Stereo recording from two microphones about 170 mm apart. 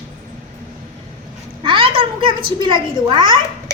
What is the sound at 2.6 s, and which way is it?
Speech, 30° right (ahead or behind).